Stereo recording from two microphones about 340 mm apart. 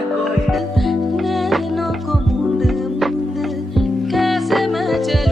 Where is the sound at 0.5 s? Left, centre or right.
Centre.